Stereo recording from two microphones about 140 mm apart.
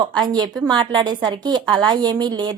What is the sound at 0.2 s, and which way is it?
A woman's voice, 30° right (ahead or behind).